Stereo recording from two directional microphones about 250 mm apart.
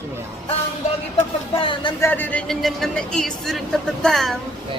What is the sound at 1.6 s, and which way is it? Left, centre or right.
Speech, centre.